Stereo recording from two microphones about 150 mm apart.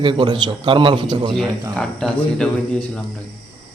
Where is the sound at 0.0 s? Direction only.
35° right (ahead or behind).